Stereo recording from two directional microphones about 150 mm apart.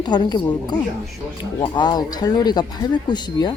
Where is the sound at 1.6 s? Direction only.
30° left (ahead or behind).